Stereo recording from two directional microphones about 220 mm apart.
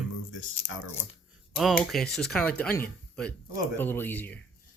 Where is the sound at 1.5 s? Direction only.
Centre (ahead or behind).